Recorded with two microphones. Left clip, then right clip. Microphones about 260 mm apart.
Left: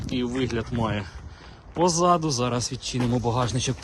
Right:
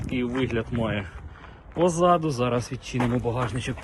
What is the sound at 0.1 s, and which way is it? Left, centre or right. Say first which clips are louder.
Speech: even; centre.